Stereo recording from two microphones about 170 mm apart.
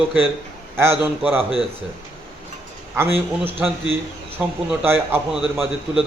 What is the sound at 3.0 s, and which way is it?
Speech, 35° right (ahead or behind).